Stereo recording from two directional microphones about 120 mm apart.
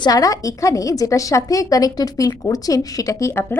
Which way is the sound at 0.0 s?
30° left (ahead or behind).